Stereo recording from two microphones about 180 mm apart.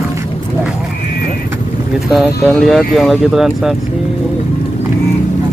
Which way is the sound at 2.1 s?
Centre (ahead or behind).